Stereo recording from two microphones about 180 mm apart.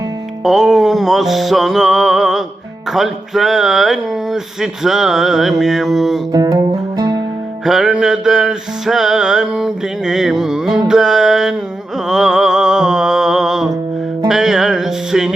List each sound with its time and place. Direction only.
0.4 s music: centre (ahead or behind)
6.3 s music: 20° right (ahead or behind)
7.6 s music: centre (ahead or behind)